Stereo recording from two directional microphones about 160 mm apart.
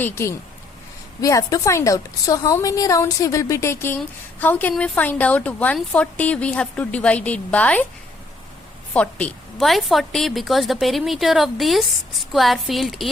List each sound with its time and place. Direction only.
0.0 s a woman's voice: 15° left (ahead or behind)
8.9 s a woman's voice: 10° left (ahead or behind)